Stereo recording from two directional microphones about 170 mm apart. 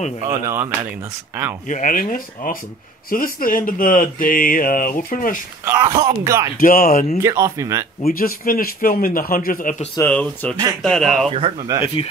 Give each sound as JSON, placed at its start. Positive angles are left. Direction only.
{"t": 0.3, "sound": "speech", "side_deg": -20}
{"t": 1.7, "sound": "speech", "side_deg": 50}
{"t": 5.7, "sound": "speech", "side_deg": -20}
{"t": 6.6, "sound": "speech", "side_deg": 55}
{"t": 7.2, "sound": "speech", "side_deg": -20}
{"t": 8.1, "sound": "speech", "side_deg": 55}
{"t": 10.0, "sound": "speech", "side_deg": 10}
{"t": 11.2, "sound": "speech", "side_deg": -35}
{"t": 11.8, "sound": "speech", "side_deg": 35}